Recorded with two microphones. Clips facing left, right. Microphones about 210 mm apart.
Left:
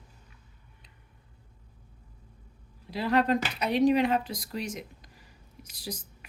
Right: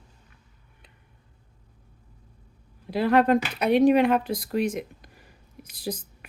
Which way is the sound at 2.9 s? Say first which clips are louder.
Right 5 dB; 55° right (ahead or behind).